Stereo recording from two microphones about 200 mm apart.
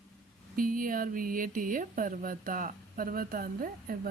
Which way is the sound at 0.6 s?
45° right (ahead or behind).